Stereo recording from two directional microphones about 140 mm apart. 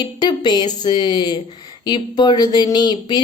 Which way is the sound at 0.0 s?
30° left (ahead or behind).